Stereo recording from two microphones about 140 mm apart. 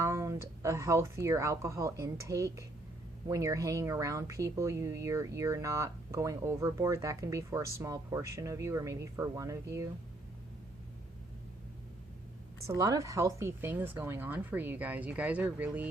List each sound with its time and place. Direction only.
0.0 s speech: 20° right (ahead or behind)
12.6 s speech: 25° right (ahead or behind)